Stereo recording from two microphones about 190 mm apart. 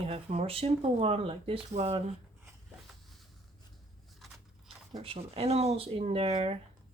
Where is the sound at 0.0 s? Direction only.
30° right (ahead or behind).